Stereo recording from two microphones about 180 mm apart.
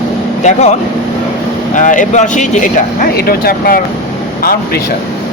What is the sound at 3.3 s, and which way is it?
Speech, 55° left (ahead or behind).